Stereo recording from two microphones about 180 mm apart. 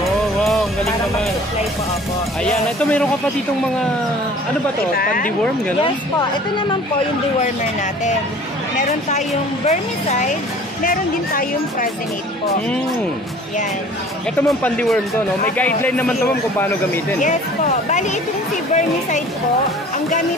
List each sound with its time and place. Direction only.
2.8 s speech: 5° left (ahead or behind)
4.9 s speech: 50° left (ahead or behind)
9.7 s speech: 40° left (ahead or behind)
14.6 s speech: 10° left (ahead or behind)
17.2 s speech: 40° left (ahead or behind)